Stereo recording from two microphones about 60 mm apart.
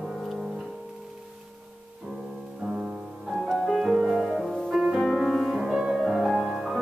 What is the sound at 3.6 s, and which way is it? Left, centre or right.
Music, centre.